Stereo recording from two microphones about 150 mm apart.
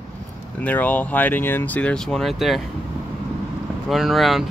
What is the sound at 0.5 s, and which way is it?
Speech, 10° left (ahead or behind).